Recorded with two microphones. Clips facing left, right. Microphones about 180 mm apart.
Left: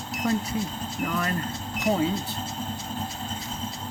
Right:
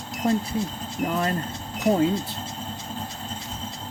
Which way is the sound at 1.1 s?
25° right (ahead or behind).